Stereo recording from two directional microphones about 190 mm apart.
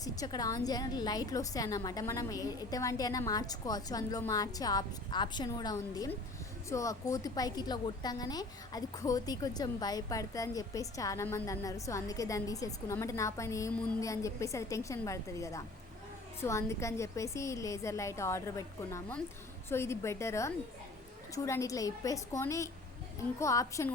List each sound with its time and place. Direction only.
0.0 s a woman's voice: 20° left (ahead or behind)